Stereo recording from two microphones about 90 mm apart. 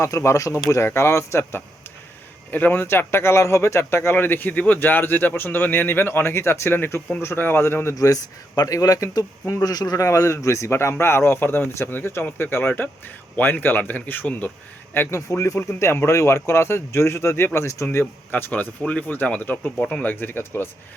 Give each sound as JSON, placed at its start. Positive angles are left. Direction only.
{"t": 0.0, "sound": "a man's voice", "side_deg": 35}
{"t": 7.9, "sound": "a man's voice", "side_deg": 40}
{"t": 14.9, "sound": "a man's voice", "side_deg": 30}